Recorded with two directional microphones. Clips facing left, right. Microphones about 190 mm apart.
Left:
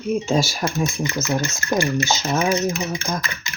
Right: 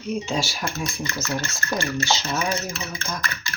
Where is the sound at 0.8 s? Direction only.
20° left (ahead or behind).